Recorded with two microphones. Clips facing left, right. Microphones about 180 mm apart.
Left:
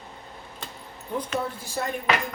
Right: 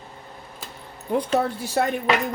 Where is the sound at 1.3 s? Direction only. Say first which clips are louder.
Right 9 dB; 70° right (ahead or behind).